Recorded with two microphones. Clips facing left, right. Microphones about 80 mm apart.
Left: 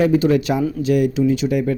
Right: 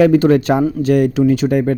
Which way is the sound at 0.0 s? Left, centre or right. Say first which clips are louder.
Right 5 dB; right.